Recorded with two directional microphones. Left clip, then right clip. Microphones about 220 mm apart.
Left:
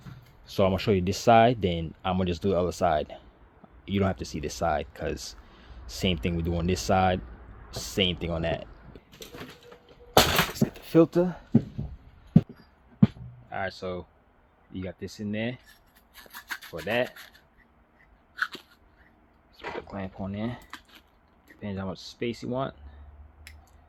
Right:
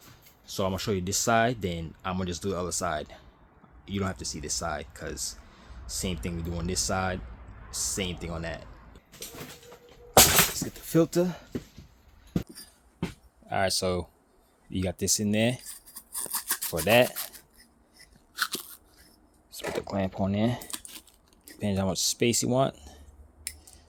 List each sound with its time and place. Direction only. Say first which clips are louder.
0.4 s speech: left 5 dB; 20° left (ahead or behind)
10.8 s speech: left 4 dB; 10° left (ahead or behind)
13.5 s speech: right 6 dB; 60° right (ahead or behind)
16.5 s rub: right 3 dB; 25° right (ahead or behind)
16.8 s speech: right 7 dB; 55° right (ahead or behind)
18.3 s crunch: even; 20° right (ahead or behind)
19.5 s a sound: right 4 dB; 60° right (ahead or behind)
20.2 s speech: right 7 dB; 55° right (ahead or behind)